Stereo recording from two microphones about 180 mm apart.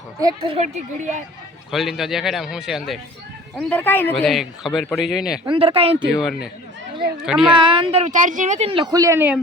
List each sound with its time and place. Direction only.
0.2 s speech: 20° right (ahead or behind)
0.5 s speech: 40° right (ahead or behind)
1.7 s speech: centre (ahead or behind)
5.5 s speech: 30° right (ahead or behind)
6.1 s speech: 5° right (ahead or behind)
7.5 s speech: 25° right (ahead or behind); by 9.4 s 10° right (ahead or behind)